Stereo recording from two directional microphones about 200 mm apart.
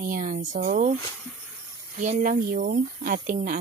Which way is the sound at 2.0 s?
40° right (ahead or behind).